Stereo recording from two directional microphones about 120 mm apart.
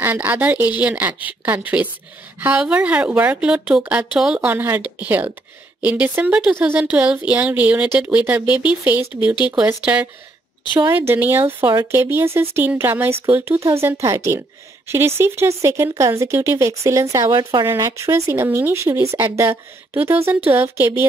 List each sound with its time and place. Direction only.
0.0 s speech: 15° right (ahead or behind)
4.5 s speech: 15° right (ahead or behind)
10.9 s speech: 15° right (ahead or behind)